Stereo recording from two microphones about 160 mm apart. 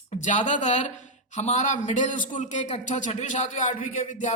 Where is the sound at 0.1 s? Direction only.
50° left (ahead or behind).